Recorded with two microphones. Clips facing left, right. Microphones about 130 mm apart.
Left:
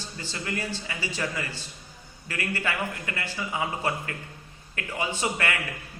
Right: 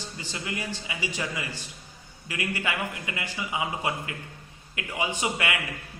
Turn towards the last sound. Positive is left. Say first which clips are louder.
# even
turn(degrees=-15)  # may be behind; listen again after turning